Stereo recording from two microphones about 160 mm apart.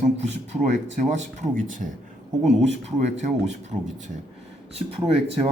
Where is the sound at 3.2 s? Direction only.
45° right (ahead or behind).